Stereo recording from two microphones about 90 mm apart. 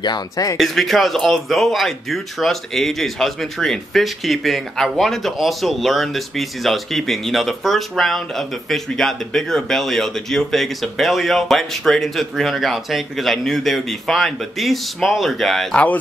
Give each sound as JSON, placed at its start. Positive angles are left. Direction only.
{"t": 0.0, "sound": "speech", "side_deg": 50}
{"t": 0.6, "sound": "speech", "side_deg": 0}